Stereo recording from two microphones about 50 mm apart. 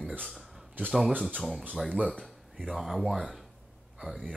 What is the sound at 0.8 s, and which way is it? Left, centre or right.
Speech, right.